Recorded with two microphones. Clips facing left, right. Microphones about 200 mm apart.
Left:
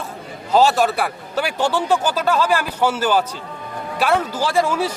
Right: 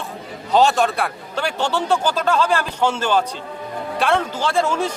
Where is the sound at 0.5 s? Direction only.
5° left (ahead or behind).